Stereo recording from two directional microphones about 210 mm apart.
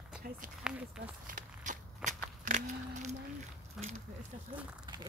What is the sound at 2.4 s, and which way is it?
Speech, 35° right (ahead or behind).